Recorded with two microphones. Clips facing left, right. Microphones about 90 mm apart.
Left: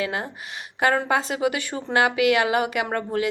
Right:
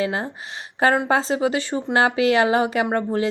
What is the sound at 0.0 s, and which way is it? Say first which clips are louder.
A woman's voice: right 3 dB; 30° right (ahead or behind).